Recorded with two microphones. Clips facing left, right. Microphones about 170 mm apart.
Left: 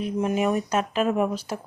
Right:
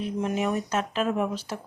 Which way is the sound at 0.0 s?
10° left (ahead or behind).